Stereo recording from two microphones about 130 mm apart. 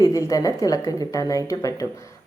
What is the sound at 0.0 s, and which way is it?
Speech, 25° left (ahead or behind).